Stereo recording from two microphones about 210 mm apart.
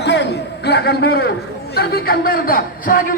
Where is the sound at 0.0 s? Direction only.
55° left (ahead or behind).